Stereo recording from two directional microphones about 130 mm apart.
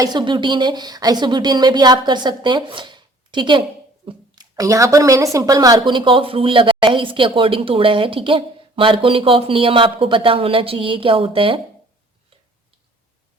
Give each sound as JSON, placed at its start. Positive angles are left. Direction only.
{"t": 0.0, "sound": "speech", "side_deg": -35}